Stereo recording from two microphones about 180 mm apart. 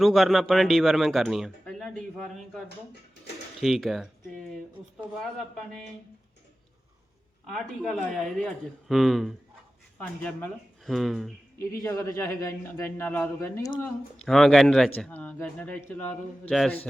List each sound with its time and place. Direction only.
0.0 s a man's voice: centre (ahead or behind)
3.6 s a man's voice: centre (ahead or behind)
7.4 s a man's voice: centre (ahead or behind)
11.8 s a man's voice: 15° left (ahead or behind)
14.3 s a man's voice: centre (ahead or behind)